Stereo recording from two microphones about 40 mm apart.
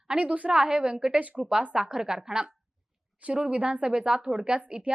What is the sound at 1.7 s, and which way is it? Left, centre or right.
Speech, centre.